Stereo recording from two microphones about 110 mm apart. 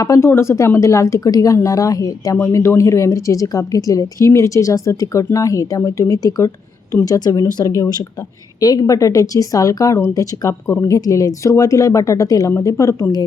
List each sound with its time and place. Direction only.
0.0 s a woman's voice: 25° left (ahead or behind)